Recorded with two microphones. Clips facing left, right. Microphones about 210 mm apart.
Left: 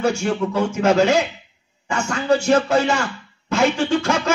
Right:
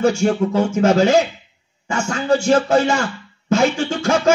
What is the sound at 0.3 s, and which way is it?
A man's voice, 45° right (ahead or behind).